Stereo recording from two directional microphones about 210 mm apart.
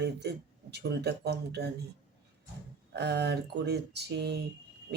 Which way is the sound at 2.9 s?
55° right (ahead or behind).